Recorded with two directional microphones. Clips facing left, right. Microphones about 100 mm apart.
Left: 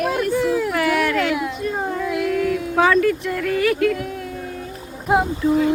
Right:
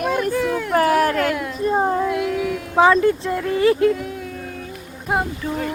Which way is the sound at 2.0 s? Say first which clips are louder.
Left 1 dB; centre (ahead or behind).